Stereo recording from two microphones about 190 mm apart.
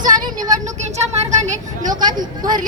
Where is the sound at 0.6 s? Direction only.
35° right (ahead or behind).